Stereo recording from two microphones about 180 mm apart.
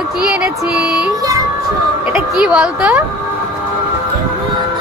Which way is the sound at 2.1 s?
5° right (ahead or behind).